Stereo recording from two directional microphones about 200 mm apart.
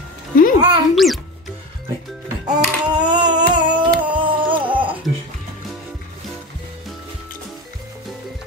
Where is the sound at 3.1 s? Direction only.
20° right (ahead or behind).